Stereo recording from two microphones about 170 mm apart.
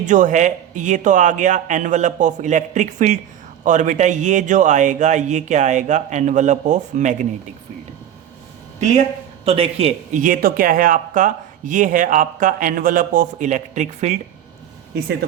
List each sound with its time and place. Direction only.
0.0 s speech: 45° right (ahead or behind)
8.8 s speech: 40° right (ahead or behind)